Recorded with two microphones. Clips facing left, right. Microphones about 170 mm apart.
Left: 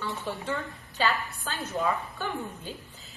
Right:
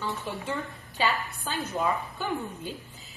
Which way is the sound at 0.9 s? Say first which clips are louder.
Even; 15° right (ahead or behind).